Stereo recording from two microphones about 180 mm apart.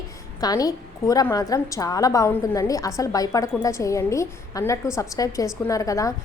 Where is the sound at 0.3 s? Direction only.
20° left (ahead or behind).